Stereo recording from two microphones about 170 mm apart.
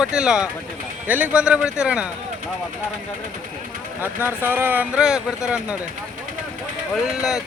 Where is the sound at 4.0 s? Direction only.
10° right (ahead or behind).